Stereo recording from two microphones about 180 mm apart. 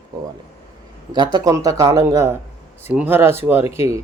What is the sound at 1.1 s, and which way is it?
Speech, 25° right (ahead or behind).